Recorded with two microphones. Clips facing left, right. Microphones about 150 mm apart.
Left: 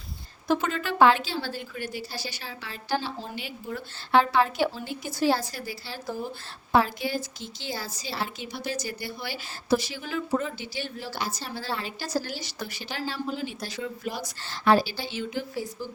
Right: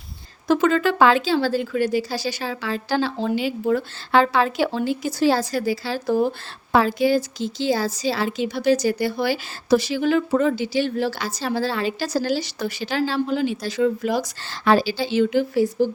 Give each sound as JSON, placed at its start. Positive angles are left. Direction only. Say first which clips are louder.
{"t": 0.4, "sound": "a woman's voice", "louder": "right 8 dB", "side_deg": -90}
{"t": 6.7, "sound": "a woman's voice", "louder": "right 6 dB", "side_deg": -90}